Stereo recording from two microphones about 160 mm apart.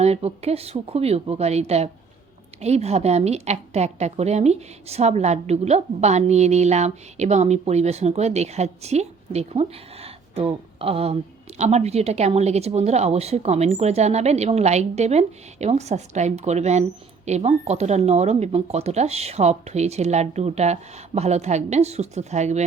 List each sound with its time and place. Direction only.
0.0 s a woman's voice: 40° right (ahead or behind)